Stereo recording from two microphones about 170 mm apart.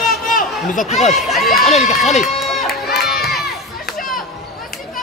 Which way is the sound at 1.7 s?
40° left (ahead or behind).